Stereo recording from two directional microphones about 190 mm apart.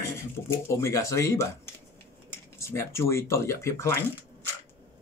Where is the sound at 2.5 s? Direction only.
15° left (ahead or behind).